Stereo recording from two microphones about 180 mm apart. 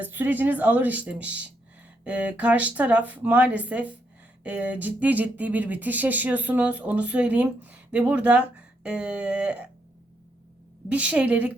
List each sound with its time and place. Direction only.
0.0 s speech: 10° right (ahead or behind)
10.8 s speech: 10° right (ahead or behind)